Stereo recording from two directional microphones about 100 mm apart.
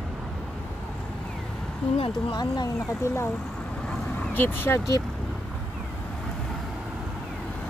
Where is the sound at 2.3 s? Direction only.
45° left (ahead or behind).